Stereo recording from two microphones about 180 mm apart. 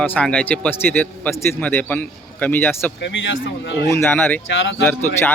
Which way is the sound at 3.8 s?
15° left (ahead or behind).